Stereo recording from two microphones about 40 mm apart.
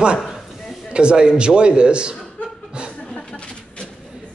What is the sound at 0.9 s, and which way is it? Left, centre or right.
A man's voice, right.